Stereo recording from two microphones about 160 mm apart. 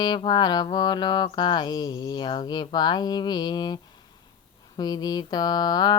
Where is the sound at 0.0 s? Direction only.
25° left (ahead or behind).